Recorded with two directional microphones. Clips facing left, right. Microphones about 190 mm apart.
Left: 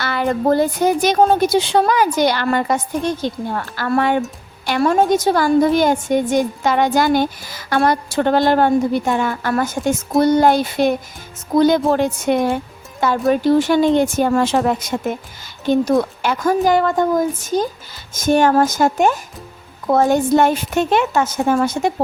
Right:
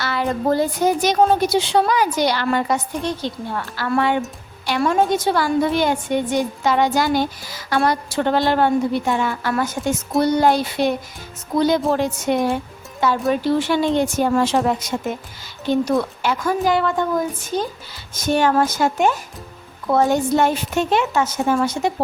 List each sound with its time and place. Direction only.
0.0 s a woman's voice: 55° left (ahead or behind)